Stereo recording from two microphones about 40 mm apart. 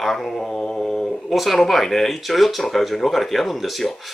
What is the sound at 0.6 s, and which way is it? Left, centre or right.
Mantra, left.